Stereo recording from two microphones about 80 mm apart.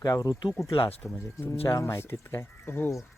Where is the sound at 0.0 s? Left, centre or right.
Left.